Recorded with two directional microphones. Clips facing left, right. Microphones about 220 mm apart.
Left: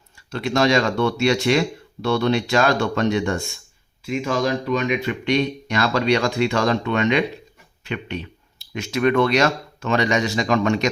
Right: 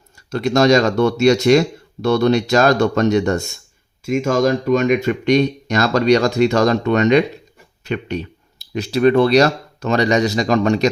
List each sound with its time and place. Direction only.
0.3 s speech: 40° right (ahead or behind)